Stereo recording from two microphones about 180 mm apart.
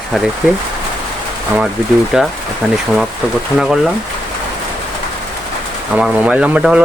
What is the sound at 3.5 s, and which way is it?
Speech, centre (ahead or behind).